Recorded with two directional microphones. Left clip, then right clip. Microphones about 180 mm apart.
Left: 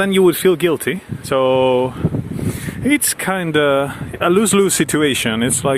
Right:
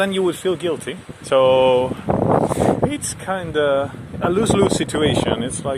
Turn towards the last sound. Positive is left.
turn(degrees=25)  # may be behind; listen again after turning